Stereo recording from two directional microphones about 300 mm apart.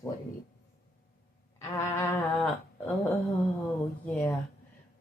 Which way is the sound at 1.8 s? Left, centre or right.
Centre.